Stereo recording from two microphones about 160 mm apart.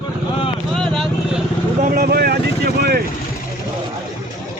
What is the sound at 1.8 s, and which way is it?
Vehicle, 60° right (ahead or behind).